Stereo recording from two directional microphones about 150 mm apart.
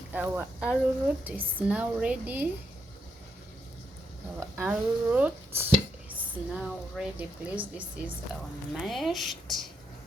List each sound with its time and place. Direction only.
0.1 s a woman's voice: 10° right (ahead or behind)
4.4 s a woman's voice: 15° right (ahead or behind); by 9.3 s centre (ahead or behind)